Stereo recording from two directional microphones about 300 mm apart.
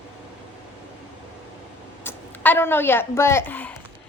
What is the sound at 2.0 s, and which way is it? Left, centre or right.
A woman's voice, centre.